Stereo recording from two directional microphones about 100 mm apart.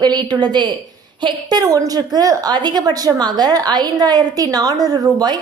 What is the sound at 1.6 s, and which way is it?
A woman's voice, 40° right (ahead or behind).